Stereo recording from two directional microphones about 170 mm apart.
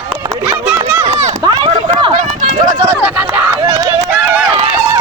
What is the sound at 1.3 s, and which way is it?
Run, 25° right (ahead or behind).